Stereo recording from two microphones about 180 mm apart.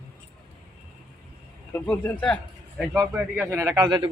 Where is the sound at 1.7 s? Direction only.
10° left (ahead or behind).